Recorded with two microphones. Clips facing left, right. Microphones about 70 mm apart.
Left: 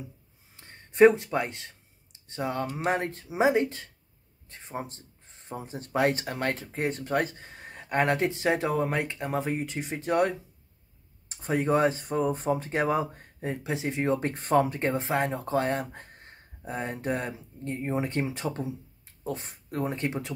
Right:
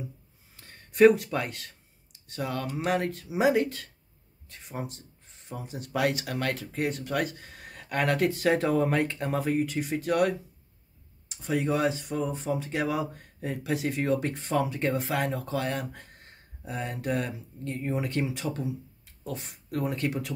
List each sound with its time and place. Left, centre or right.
0.6 s a sound: left
2.7 s speech: left
4.5 s a sound: left
5.9 s speech: left
11.2 s speech: left
14.3 s speech: left